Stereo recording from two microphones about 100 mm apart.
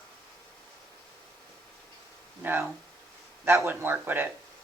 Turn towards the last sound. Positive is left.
turn(degrees=-20)  # may be behind; listen again after turning